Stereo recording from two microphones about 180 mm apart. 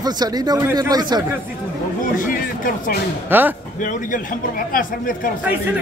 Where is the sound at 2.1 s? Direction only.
50° left (ahead or behind).